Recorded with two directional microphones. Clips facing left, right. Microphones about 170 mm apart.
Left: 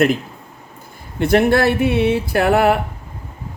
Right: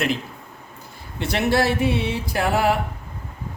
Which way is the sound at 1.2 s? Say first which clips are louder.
Left 7 dB; 55° left (ahead or behind).